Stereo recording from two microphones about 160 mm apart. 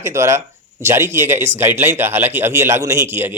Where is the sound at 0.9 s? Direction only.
15° right (ahead or behind).